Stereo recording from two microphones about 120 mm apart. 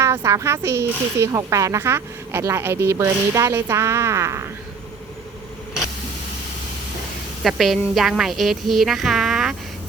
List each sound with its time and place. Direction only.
0.0 s speech: 25° right (ahead or behind)
7.4 s a woman's voice: centre (ahead or behind)